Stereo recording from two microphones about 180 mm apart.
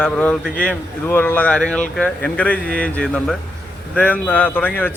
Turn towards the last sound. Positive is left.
turn(degrees=10)  # may be behind; listen again after turning